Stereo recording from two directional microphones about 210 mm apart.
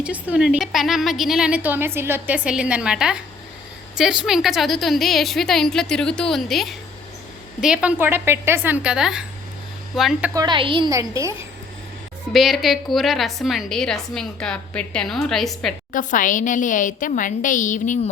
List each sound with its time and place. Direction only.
0.0 s a woman's voice: 5° right (ahead or behind)
10.4 s a woman's voice: 25° right (ahead or behind)
12.3 s a woman's voice: centre (ahead or behind)
15.9 s a woman's voice: 40° left (ahead or behind)